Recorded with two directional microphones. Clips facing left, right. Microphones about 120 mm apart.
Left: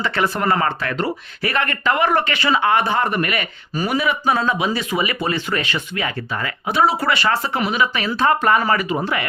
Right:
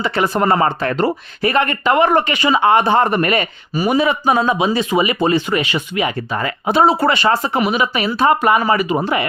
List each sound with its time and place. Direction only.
0.0 s speech: 15° right (ahead or behind)
0.3 s speech: 25° right (ahead or behind)
1.4 s speech: 20° right (ahead or behind)